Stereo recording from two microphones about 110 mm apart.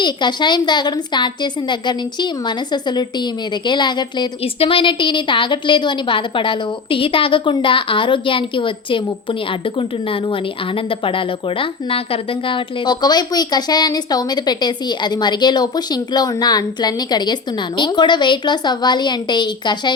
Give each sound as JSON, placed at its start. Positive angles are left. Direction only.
{"t": 0.0, "sound": "a woman's voice", "side_deg": 45}